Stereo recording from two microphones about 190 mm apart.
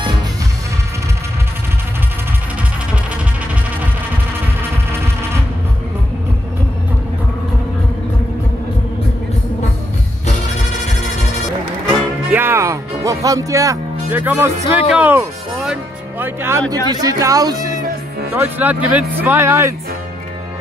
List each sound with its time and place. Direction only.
12.3 s music: 10° right (ahead or behind)
16.9 s speech: 20° right (ahead or behind)